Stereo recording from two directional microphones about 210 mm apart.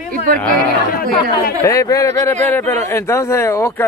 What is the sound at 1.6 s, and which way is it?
Speech, 15° left (ahead or behind).